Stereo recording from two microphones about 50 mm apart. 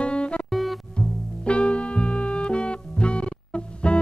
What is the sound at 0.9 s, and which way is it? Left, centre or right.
Music, left.